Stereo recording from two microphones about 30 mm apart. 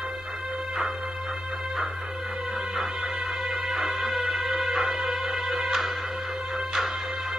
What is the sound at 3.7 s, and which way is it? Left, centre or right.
Music, centre.